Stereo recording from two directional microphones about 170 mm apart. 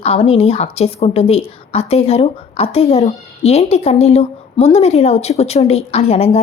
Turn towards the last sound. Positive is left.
turn(degrees=35)  # may be behind; listen again after turning